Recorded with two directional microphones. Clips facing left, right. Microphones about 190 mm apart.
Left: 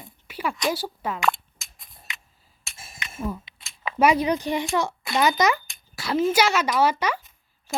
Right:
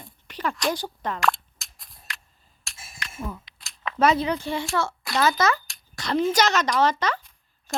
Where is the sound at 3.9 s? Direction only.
10° left (ahead or behind).